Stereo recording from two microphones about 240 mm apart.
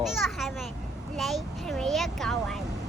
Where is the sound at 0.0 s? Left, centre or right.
Centre.